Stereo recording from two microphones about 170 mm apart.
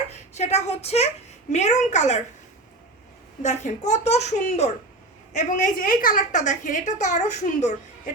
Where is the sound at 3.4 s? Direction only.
45° left (ahead or behind).